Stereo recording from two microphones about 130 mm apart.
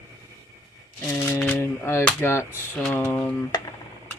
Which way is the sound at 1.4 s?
10° left (ahead or behind).